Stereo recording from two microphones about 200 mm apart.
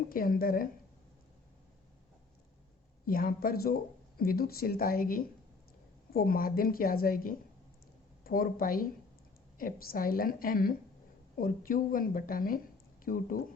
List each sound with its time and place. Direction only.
0.1 s a woman's voice: 45° left (ahead or behind)
3.1 s a woman's voice: 45° left (ahead or behind)